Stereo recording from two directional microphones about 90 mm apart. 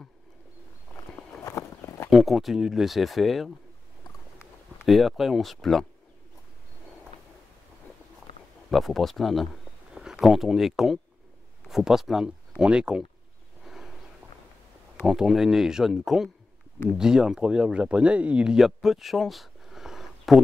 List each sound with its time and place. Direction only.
1.4 s a sound: 30° left (ahead or behind)
2.0 s speech: centre (ahead or behind)
4.8 s speech: centre (ahead or behind)
8.6 s speech: centre (ahead or behind)
15.0 s speech: 5° right (ahead or behind)